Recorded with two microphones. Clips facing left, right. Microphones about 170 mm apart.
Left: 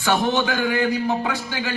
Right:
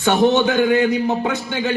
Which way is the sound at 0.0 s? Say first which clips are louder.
Right 6 dB; 20° right (ahead or behind).